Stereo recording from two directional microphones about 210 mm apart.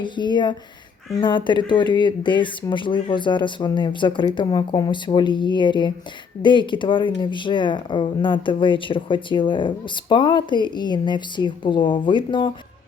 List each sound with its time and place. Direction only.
0.0 s speech: 20° left (ahead or behind)